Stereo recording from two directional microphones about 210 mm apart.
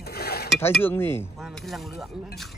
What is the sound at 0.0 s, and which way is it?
Dishes, 45° left (ahead or behind).